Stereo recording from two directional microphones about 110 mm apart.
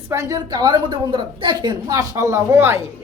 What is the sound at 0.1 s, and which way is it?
A woman's voice, 25° right (ahead or behind).